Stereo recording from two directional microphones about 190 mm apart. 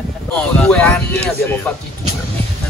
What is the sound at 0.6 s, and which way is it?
Speech, 5° left (ahead or behind).